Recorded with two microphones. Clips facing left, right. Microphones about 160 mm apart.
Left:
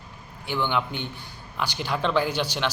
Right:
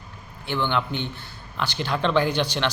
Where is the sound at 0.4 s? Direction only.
10° left (ahead or behind).